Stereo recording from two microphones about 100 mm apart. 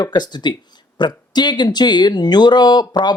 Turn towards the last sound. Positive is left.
turn(degrees=45)  # may be behind; listen again after turning